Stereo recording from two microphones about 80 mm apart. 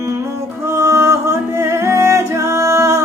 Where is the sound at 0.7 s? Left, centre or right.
Right.